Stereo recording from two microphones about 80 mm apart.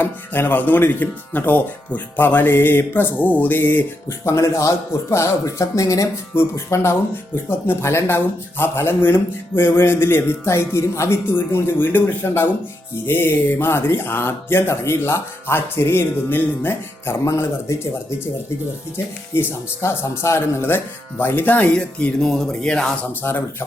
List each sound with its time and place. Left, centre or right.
0.0 s speech: left
4.3 s speech: left
19.3 s speech: left; by 22.9 s centre
23.2 s speech: left